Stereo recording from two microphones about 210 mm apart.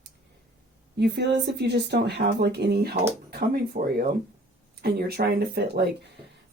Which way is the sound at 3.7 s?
35° right (ahead or behind).